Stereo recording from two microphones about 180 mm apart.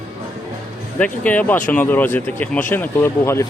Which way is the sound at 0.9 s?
5° left (ahead or behind).